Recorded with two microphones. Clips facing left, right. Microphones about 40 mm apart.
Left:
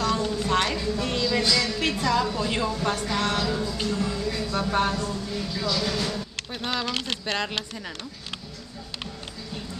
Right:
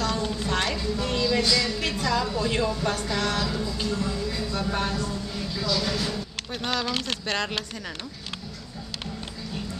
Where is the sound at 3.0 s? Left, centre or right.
Left.